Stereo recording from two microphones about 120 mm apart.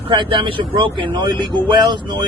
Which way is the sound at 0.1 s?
40° right (ahead or behind).